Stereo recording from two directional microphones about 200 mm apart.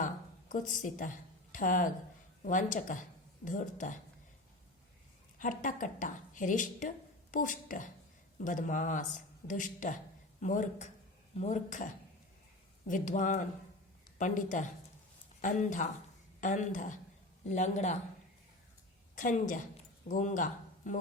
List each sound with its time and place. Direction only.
0.0 s a sound: 40° left (ahead or behind)
1.5 s speech: 40° left (ahead or behind)
5.4 s speech: 40° left (ahead or behind)
12.9 s speech: 40° left (ahead or behind)
19.1 s a woman's voice: 40° left (ahead or behind)